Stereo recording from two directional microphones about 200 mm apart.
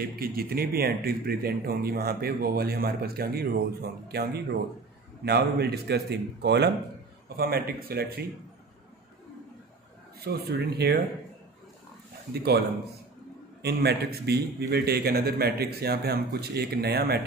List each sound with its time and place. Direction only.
0.0 s a man's voice: 50° right (ahead or behind)
10.2 s a man's voice: 55° right (ahead or behind)
13.6 s a man's voice: 55° right (ahead or behind)